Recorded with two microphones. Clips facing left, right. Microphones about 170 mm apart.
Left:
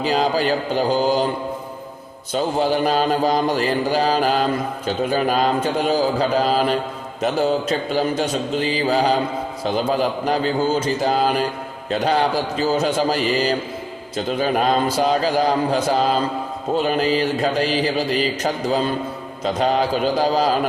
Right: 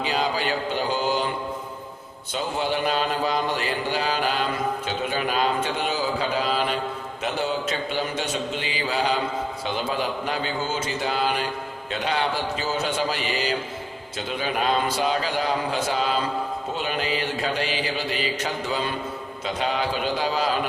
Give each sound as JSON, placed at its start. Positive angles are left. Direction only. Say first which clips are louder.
{"t": 0.0, "sound": "mantra", "louder": "left 6 dB", "side_deg": 40}
{"t": 2.3, "sound": "mantra", "louder": "left 7 dB", "side_deg": 40}